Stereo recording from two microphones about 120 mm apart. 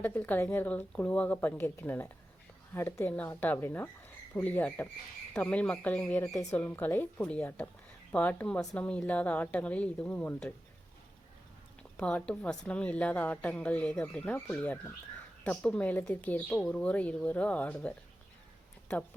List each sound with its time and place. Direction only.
0.0 s a woman's voice: 15° left (ahead or behind)
11.8 s a woman's voice: 10° left (ahead or behind)